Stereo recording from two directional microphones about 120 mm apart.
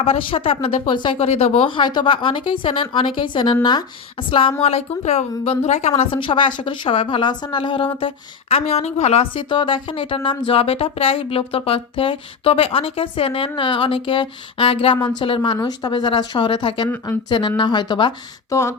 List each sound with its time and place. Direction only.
0.0 s speech: 50° left (ahead or behind)
1.3 s a woman's voice: 60° left (ahead or behind)
1.6 s speech: 40° left (ahead or behind)
4.6 s a woman's voice: 60° left (ahead or behind)
6.0 s speech: 45° left (ahead or behind)
15.5 s speech: 35° left (ahead or behind)
18.5 s a sound: 25° left (ahead or behind)